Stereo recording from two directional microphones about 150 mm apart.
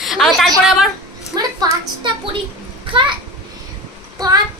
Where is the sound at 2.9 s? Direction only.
35° right (ahead or behind).